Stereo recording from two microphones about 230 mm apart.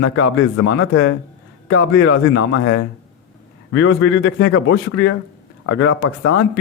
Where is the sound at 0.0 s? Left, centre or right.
Left.